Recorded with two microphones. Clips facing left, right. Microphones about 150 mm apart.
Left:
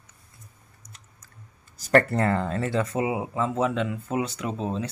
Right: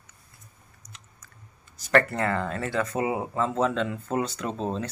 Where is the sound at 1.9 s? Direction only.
35° left (ahead or behind).